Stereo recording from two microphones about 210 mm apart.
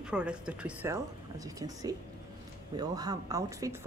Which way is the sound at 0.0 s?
5° right (ahead or behind).